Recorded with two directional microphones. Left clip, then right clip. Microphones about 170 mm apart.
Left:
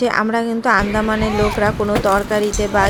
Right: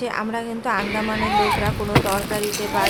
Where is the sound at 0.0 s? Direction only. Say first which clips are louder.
Left 8 dB; 35° left (ahead or behind).